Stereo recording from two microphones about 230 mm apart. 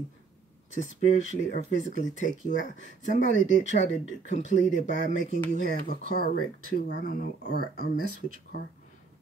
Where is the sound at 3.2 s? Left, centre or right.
Left.